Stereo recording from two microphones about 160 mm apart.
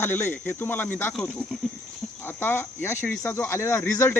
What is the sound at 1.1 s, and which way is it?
Speech, centre (ahead or behind).